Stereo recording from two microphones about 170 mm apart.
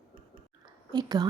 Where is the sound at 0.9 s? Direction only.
25° right (ahead or behind).